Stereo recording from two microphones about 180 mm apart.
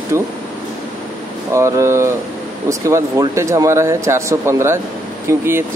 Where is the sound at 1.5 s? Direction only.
15° right (ahead or behind).